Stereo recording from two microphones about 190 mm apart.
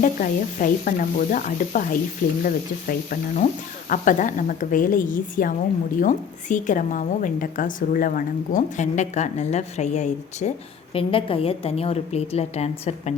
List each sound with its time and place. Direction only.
0.0 s a woman's voice: 45° left (ahead or behind)